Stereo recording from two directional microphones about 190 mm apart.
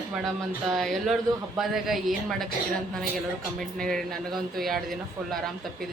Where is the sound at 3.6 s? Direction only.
5° left (ahead or behind).